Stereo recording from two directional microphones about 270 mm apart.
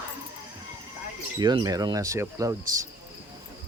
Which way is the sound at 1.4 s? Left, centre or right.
Centre.